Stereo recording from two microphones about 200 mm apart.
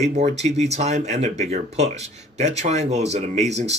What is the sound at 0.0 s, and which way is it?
Speech, 35° right (ahead or behind).